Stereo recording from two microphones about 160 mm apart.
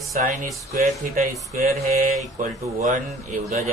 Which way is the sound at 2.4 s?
50° right (ahead or behind).